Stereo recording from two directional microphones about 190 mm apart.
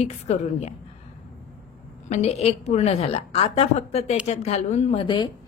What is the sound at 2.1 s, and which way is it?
A woman's voice, 35° left (ahead or behind).